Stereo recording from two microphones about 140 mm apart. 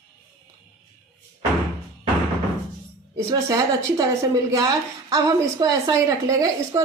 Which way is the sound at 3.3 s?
25° right (ahead or behind).